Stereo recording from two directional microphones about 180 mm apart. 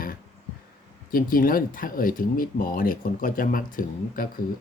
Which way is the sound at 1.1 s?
50° left (ahead or behind).